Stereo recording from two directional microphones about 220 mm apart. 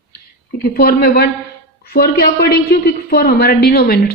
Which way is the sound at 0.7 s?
45° left (ahead or behind).